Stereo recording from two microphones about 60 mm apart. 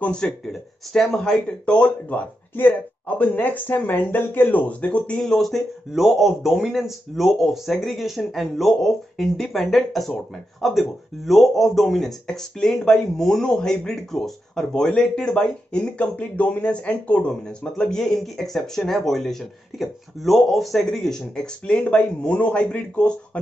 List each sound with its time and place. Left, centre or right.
0.5 s speech: centre
1.8 s speech: left
5.2 s a man's voice: centre